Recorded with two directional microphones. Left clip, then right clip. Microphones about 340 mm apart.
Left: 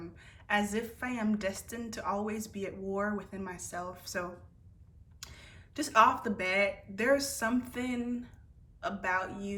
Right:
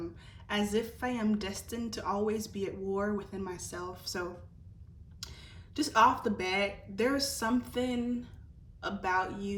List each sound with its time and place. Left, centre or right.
0.0 s a woman's voice: centre